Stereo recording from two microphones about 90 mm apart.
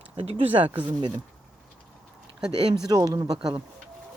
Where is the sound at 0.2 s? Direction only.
80° right; by 1.1 s 60° right (ahead or behind).